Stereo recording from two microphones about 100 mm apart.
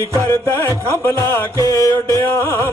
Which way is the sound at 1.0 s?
25° left (ahead or behind).